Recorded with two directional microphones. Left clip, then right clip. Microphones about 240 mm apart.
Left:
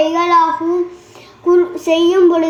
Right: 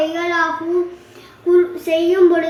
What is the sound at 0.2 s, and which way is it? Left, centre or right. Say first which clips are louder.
Child singing: left 7 dB; left.